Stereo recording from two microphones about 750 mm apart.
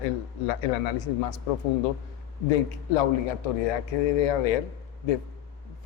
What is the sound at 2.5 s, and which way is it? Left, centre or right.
A man's voice, left.